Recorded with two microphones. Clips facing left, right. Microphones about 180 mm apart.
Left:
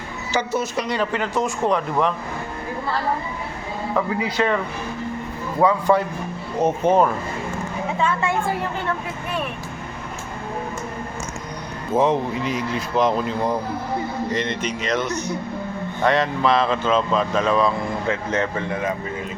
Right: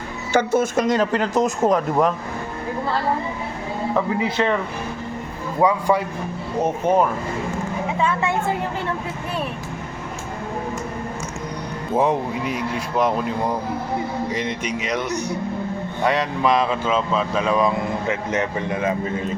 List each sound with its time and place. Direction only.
0.3 s speech: 50° right (ahead or behind)
3.9 s speech: 25° right (ahead or behind)
5.5 s speech: 10° right (ahead or behind)
11.9 s speech: 10° right (ahead or behind)
14.3 s speech: 10° right (ahead or behind)